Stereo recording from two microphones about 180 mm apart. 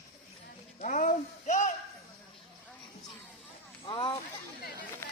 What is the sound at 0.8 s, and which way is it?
Speech, 45° left (ahead or behind).